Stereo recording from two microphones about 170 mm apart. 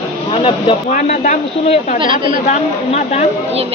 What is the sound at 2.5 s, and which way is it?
Speech, 40° left (ahead or behind).